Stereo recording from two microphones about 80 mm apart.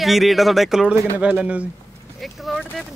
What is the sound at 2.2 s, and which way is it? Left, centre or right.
Speech, centre.